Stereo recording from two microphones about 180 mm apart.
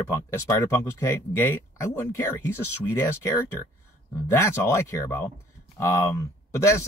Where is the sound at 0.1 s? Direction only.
15° left (ahead or behind).